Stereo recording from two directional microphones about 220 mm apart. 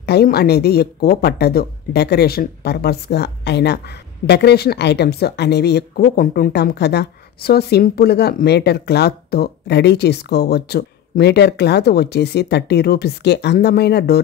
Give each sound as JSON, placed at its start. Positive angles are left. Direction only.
{"t": 0.0, "sound": "a woman's voice", "side_deg": 45}